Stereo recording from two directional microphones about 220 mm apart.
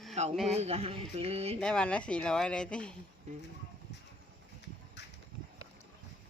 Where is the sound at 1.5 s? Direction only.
5° left (ahead or behind).